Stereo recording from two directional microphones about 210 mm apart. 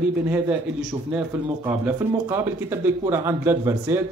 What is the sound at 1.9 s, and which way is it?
A man's voice, 10° right (ahead or behind).